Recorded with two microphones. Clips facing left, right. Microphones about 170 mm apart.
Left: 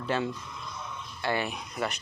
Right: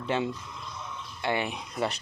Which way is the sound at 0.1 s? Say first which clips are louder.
Right 1 dB; 20° right (ahead or behind).